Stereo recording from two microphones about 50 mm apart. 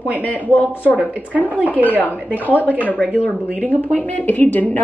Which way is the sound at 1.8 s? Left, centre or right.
Left.